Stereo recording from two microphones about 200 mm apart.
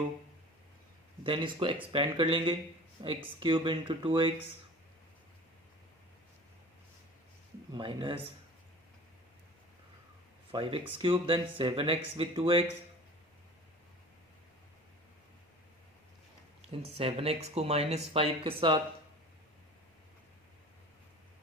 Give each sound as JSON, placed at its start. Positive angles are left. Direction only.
{"t": 1.2, "sound": "speech", "side_deg": -25}
{"t": 7.7, "sound": "speech", "side_deg": -25}
{"t": 10.5, "sound": "speech", "side_deg": -25}
{"t": 16.6, "sound": "speech", "side_deg": -30}